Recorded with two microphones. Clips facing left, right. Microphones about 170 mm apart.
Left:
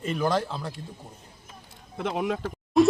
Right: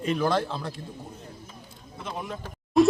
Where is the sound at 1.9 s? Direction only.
65° left (ahead or behind).